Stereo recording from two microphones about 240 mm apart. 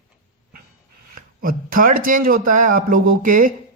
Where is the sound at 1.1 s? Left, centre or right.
Right.